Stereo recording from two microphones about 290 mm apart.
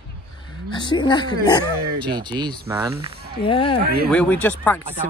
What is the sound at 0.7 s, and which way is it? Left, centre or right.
Speech, centre.